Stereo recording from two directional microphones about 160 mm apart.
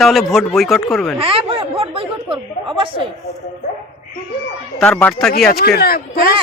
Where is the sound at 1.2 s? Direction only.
35° right (ahead or behind).